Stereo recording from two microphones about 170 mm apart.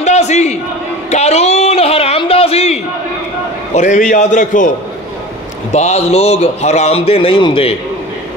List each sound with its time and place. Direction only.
0.0 s a sound: 40° left (ahead or behind)
3.7 s a man's voice: 45° left (ahead or behind)
5.7 s a man's voice: 40° left (ahead or behind)